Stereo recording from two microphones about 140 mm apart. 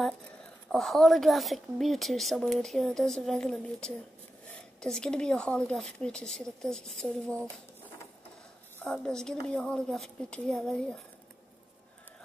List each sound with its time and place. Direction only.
0.7 s a woman's voice: centre (ahead or behind)
8.7 s a woman's voice: 5° left (ahead or behind)